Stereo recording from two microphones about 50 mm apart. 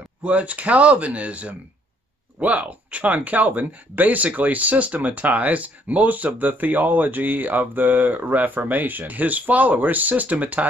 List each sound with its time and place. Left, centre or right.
0.2 s speech: right